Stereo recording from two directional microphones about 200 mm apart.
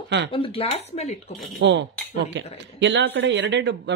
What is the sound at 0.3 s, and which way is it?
Speech, 25° left (ahead or behind).